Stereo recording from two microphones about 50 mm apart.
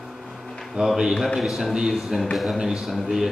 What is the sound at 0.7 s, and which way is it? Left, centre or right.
Speech, centre.